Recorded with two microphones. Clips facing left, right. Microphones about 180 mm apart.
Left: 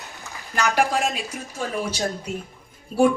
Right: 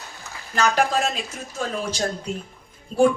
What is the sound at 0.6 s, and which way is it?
Speech, 10° left (ahead or behind).